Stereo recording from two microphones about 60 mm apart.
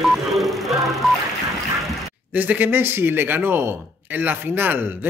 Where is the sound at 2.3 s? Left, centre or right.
Right.